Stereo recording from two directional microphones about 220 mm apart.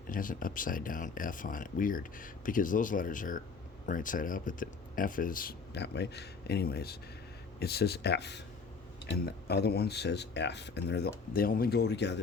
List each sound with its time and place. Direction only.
0.1 s speech: 40° left (ahead or behind)